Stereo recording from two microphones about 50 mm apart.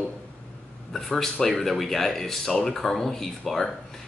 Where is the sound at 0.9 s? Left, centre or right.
Centre.